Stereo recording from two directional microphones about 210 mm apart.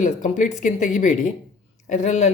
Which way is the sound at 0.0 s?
35° left (ahead or behind).